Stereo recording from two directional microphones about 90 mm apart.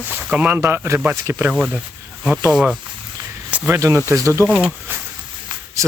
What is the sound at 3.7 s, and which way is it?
Speech, 35° right (ahead or behind).